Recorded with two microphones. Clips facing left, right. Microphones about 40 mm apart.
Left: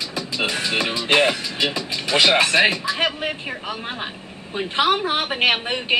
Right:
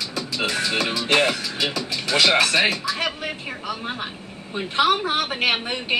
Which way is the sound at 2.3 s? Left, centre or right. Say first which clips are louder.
Left 2 dB; left.